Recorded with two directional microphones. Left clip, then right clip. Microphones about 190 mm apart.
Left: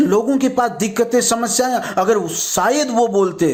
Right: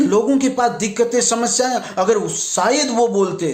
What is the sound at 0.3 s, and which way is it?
A man's voice, 25° left (ahead or behind).